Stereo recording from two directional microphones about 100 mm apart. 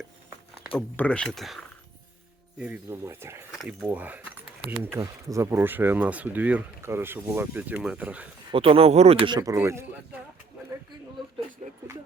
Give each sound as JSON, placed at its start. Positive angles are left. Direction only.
{"t": 0.8, "sound": "speech", "side_deg": 15}
{"t": 2.9, "sound": "speech", "side_deg": -25}
{"t": 8.5, "sound": "speech", "side_deg": -70}
{"t": 9.6, "sound": "speech", "side_deg": -25}